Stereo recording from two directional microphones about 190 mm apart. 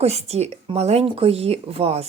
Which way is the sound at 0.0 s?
35° right (ahead or behind).